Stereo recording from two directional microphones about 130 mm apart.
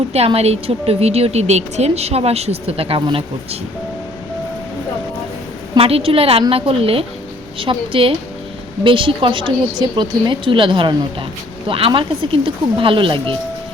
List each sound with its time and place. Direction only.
0.1 s a woman's voice: 50° right (ahead or behind)
5.7 s a woman's voice: 45° right (ahead or behind)